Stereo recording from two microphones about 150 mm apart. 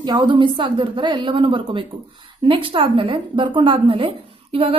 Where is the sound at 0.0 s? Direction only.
30° right (ahead or behind).